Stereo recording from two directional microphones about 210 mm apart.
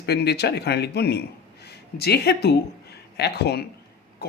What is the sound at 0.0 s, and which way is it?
A man's voice, 50° left (ahead or behind).